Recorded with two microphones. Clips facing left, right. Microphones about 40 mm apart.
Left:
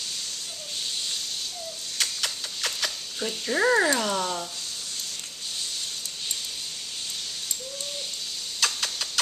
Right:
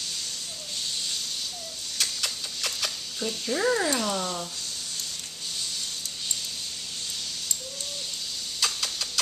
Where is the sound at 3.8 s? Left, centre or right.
Centre.